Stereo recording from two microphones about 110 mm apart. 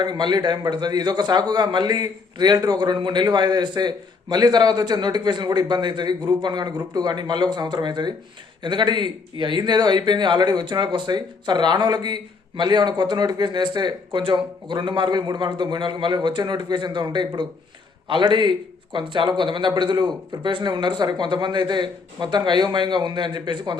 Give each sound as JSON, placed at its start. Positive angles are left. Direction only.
{"t": 0.0, "sound": "a man's voice", "side_deg": -40}